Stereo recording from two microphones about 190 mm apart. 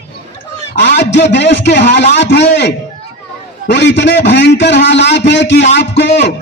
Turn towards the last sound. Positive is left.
turn(degrees=65)  # may be behind; listen again after turning